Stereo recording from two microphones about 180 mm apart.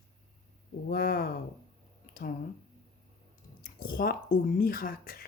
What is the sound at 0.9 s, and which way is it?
Speech, 55° left (ahead or behind).